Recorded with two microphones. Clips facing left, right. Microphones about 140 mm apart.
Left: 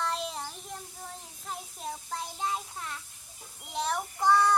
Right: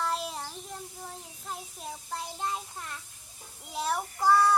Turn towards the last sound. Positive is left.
turn(degrees=-5)  # may be behind; listen again after turning